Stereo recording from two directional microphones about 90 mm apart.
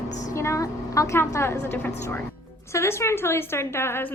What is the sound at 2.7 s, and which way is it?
A woman's voice, 30° left (ahead or behind).